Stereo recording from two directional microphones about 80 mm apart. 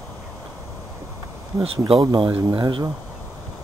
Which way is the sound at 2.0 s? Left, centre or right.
Right.